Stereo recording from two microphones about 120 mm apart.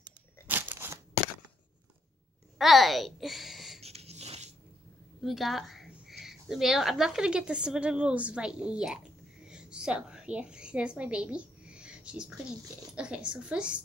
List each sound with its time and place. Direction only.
0.5 s crunch: 20° right (ahead or behind)
2.6 s a child's voice: centre (ahead or behind)
3.8 s wheeze: 60° right (ahead or behind)
5.2 s a woman's voice: centre (ahead or behind)